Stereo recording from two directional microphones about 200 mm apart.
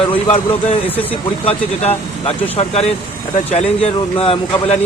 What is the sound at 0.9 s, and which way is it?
Speech, 10° left (ahead or behind).